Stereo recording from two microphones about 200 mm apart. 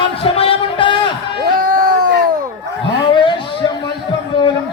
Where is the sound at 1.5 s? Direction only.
45° right (ahead or behind).